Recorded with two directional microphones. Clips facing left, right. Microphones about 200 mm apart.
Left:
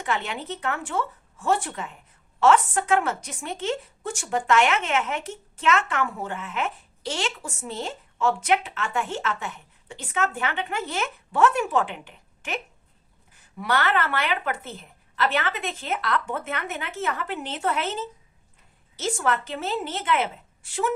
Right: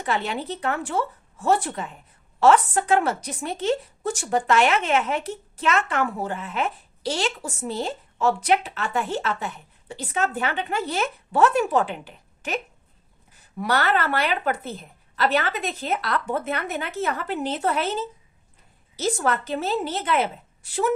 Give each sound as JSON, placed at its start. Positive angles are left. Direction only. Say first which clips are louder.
{"t": 0.0, "sound": "a woman's voice", "louder": "right 3 dB", "side_deg": -35}
{"t": 13.6, "sound": "a woman's voice", "louder": "right 2 dB", "side_deg": -40}